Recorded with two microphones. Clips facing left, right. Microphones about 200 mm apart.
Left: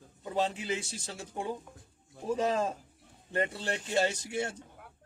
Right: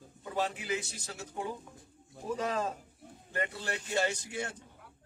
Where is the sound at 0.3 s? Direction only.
25° left (ahead or behind).